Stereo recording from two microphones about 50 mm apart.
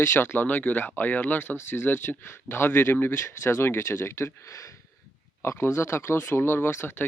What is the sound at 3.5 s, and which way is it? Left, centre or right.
Speech, left.